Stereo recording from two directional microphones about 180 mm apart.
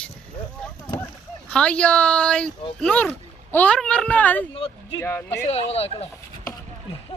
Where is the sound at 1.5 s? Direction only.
5° left (ahead or behind).